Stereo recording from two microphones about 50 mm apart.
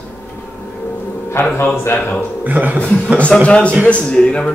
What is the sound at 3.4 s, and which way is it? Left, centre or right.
A man's voice, left.